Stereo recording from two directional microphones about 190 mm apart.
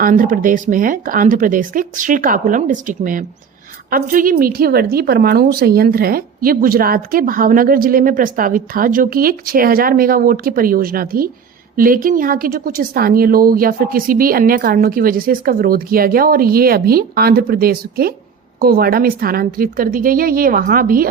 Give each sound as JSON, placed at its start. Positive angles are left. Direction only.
{"t": 0.0, "sound": "a woman's voice", "side_deg": -45}